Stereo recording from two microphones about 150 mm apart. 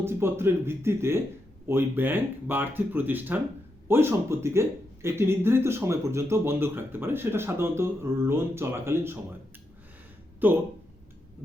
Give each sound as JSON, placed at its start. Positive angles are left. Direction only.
{"t": 0.0, "sound": "speech", "side_deg": -15}
{"t": 10.4, "sound": "speech", "side_deg": -10}